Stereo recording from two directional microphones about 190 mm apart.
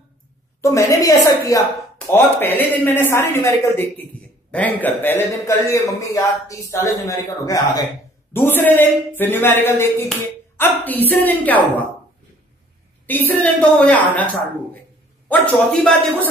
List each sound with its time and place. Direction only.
0.6 s speech: 15° left (ahead or behind)
13.0 s speech: 10° left (ahead or behind)
15.2 s a man's voice: 5° left (ahead or behind)